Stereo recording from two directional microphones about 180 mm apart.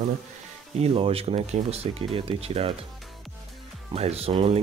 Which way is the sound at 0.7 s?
35° right (ahead or behind).